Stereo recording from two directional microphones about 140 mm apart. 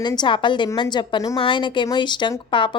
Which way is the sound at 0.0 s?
35° left (ahead or behind).